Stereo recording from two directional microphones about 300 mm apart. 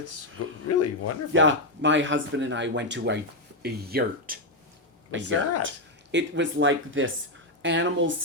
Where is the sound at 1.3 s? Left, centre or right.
Right.